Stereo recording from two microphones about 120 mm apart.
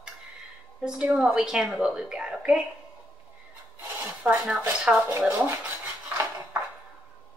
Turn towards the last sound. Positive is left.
turn(degrees=-25)  # may be behind; listen again after turning